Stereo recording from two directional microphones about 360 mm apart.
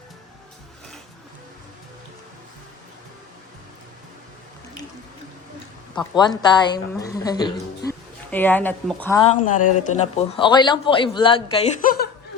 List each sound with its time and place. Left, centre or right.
6.0 s a woman's voice: centre
9.6 s speech: left
10.2 s a woman's voice: centre